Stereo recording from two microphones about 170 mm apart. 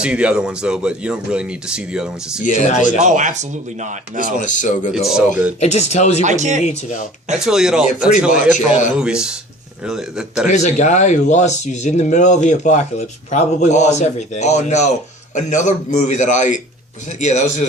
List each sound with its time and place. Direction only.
0.0 s speech: 5° right (ahead or behind)
2.4 s speech: 45° left (ahead or behind)
3.0 s speech: 45° right (ahead or behind)
4.3 s speech: 50° left (ahead or behind)
4.9 s speech: centre (ahead or behind)
5.5 s speech: 40° left (ahead or behind)
6.2 s speech: 45° right (ahead or behind)
6.6 s speech: 40° left (ahead or behind)
7.3 s speech: 5° right (ahead or behind)
8.4 s speech: 45° left (ahead or behind)
9.0 s speech: 5° right (ahead or behind)
10.5 s speech: 45° left (ahead or behind)